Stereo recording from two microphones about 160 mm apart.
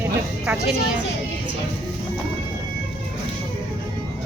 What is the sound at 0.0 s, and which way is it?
Speech, 5° right (ahead or behind).